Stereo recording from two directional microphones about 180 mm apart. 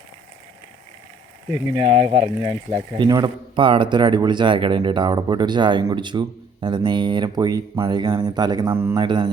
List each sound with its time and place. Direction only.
1.7 s speech: 35° right (ahead or behind); by 9.0 s 15° right (ahead or behind)
9.0 s speech: 25° right (ahead or behind)